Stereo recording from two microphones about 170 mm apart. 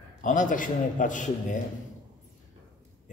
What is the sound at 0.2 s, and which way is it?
Speech, 50° left (ahead or behind).